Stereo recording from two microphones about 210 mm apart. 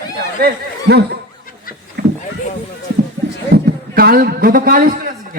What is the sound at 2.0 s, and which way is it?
Rowboat, 45° right (ahead or behind).